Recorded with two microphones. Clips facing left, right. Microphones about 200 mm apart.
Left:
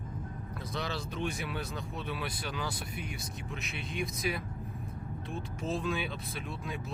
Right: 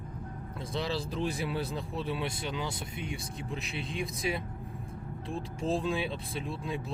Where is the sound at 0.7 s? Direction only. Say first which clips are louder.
Right 4 dB; 30° right (ahead or behind).